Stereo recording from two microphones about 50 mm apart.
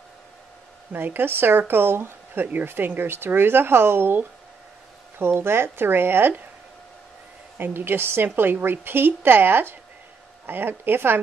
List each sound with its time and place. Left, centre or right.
0.9 s a woman's voice: right
7.5 s a woman's voice: right